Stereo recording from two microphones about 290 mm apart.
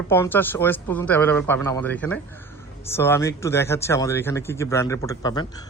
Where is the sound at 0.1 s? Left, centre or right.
Centre.